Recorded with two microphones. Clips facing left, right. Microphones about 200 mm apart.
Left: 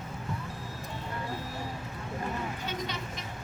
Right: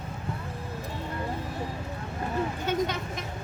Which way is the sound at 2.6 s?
50° right (ahead or behind).